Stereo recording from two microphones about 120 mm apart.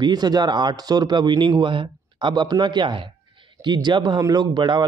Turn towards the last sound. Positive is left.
turn(degrees=-40)  # may be behind; listen again after turning